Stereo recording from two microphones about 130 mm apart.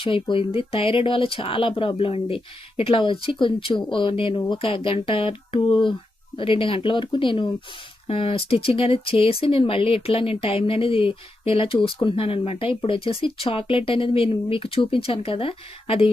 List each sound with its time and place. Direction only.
0.0 s speech: 40° left (ahead or behind)